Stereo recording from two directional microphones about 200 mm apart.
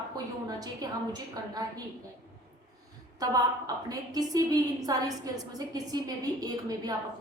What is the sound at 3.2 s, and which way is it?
A woman's voice, 20° right (ahead or behind).